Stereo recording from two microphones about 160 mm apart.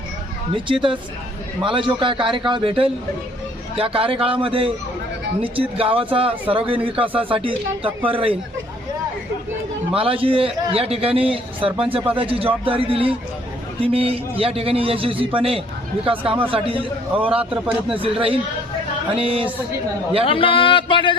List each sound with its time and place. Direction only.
0.5 s a man's voice: 30° right (ahead or behind)
9.9 s a man's voice: 35° right (ahead or behind)
20.2 s speech: 35° left (ahead or behind)